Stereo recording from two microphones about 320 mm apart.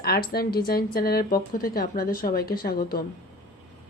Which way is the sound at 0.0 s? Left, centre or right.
Left.